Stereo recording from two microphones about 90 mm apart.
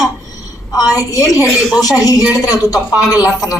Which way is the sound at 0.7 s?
40° left (ahead or behind).